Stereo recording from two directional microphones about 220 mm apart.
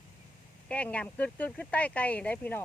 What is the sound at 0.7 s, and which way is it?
Speech, 5° left (ahead or behind).